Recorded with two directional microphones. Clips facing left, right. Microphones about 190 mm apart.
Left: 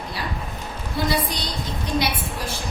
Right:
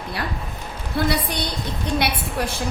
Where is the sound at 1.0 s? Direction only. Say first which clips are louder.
Right 3 dB; 60° right (ahead or behind).